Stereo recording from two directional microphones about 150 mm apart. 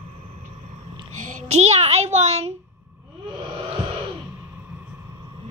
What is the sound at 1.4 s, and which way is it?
A child's voice, 45° right (ahead or behind).